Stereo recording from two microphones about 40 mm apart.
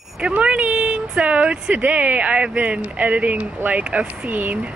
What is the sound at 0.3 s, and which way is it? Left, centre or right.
Speech, right.